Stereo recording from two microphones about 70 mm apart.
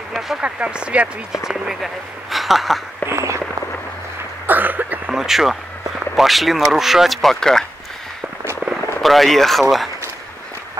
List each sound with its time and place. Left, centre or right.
0.4 s speech: centre
3.1 s a sound: right
4.5 s cough: right
5.1 s speech: centre
9.0 s speech: centre